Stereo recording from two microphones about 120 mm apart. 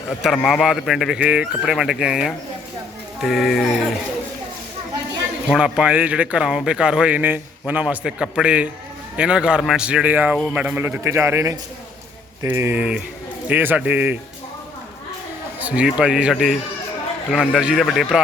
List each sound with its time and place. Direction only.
0.2 s speech: centre (ahead or behind)
5.5 s speech: 5° right (ahead or behind)
9.8 s speech: 10° right (ahead or behind)
15.6 s speech: 10° right (ahead or behind)
17.3 s a man's voice: 5° left (ahead or behind)
17.6 s speech: 5° right (ahead or behind)